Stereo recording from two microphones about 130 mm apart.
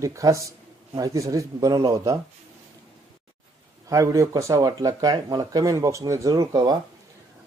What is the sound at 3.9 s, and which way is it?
Speech, 25° right (ahead or behind).